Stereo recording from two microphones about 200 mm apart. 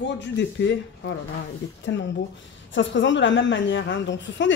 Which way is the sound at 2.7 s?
65° left (ahead or behind).